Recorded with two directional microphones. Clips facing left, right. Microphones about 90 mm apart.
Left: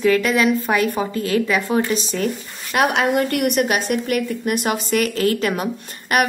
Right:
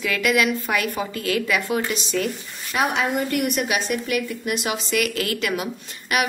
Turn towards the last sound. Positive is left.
turn(degrees=45)  # may be behind; listen again after turning